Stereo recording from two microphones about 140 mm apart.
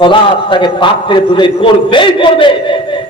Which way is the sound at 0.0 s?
35° left (ahead or behind).